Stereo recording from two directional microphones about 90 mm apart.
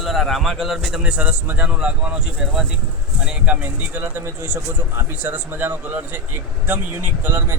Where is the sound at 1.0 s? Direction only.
15° right (ahead or behind).